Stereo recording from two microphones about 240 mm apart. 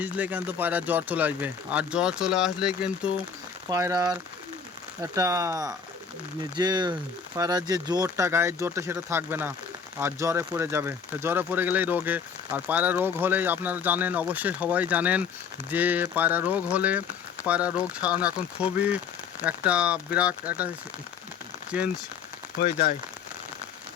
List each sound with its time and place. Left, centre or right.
0.0 s speech: centre